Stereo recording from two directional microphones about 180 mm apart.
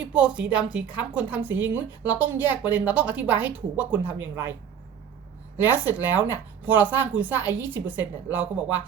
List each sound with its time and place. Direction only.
0.0 s a woman's voice: 5° right (ahead or behind)
5.5 s a woman's voice: 10° right (ahead or behind)